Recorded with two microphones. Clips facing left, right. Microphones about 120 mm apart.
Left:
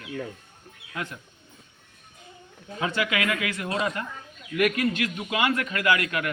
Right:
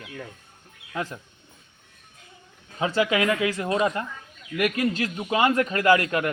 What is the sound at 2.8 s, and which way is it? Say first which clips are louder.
A man's voice: right 4 dB; 30° right (ahead or behind).